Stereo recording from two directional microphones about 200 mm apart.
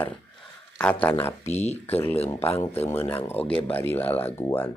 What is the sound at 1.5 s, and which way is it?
Speech, 35° left (ahead or behind).